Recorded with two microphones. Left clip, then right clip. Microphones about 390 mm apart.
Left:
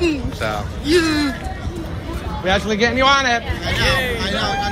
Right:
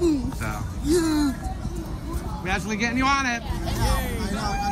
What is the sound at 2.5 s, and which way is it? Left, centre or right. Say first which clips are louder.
Speech: left 9 dB; centre.